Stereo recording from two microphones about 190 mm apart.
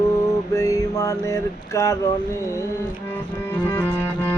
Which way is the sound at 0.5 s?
20° left (ahead or behind).